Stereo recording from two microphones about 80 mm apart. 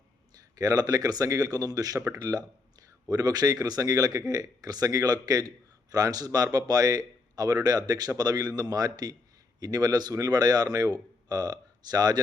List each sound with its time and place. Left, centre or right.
0.5 s a man's voice: right